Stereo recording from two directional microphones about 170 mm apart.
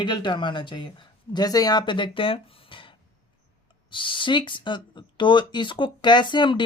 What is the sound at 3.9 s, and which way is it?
Speech, 30° left (ahead or behind).